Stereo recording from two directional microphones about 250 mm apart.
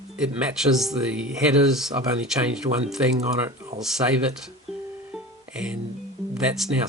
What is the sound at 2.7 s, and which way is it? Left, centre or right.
Speech, right.